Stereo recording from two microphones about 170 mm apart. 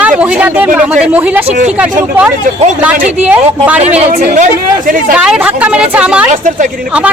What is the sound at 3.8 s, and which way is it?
Speech, 40° right (ahead or behind).